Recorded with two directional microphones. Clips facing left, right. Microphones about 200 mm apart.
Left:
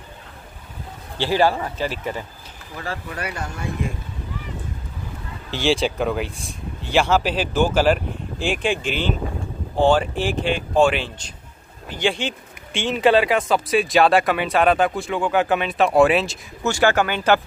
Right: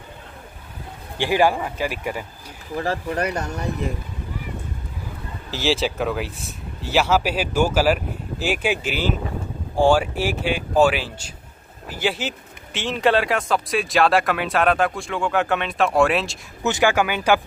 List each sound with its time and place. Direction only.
1.1 s speech: 15° right (ahead or behind)
2.8 s speech: 40° right (ahead or behind)
5.5 s speech: 5° right (ahead or behind)
16.6 s speech: 15° right (ahead or behind)